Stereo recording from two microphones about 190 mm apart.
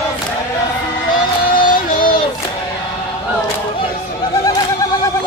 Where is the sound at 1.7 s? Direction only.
50° left (ahead or behind).